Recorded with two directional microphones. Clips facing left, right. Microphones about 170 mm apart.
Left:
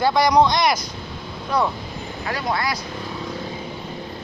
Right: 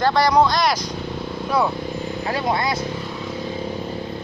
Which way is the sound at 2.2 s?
25° right (ahead or behind).